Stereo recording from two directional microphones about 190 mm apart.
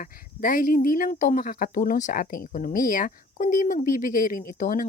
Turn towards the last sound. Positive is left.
turn(degrees=45)  # may be behind; listen again after turning